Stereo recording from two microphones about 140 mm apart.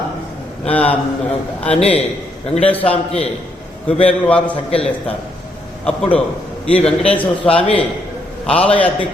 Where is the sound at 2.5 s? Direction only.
10° left (ahead or behind).